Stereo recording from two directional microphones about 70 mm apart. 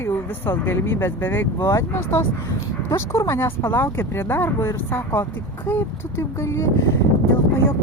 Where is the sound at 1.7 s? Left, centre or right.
Left.